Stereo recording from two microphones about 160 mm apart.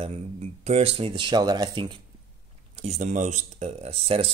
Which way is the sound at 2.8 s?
45° right (ahead or behind).